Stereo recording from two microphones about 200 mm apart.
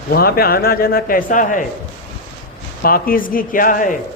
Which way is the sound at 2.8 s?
45° left (ahead or behind).